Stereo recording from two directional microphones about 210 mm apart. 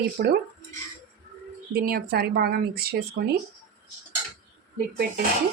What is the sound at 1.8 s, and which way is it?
Speech, 45° right (ahead or behind).